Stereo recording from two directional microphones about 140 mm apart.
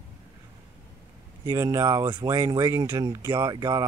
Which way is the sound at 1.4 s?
25° right (ahead or behind).